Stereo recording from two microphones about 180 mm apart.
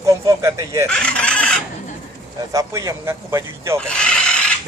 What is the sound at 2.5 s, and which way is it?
Speech, 15° right (ahead or behind).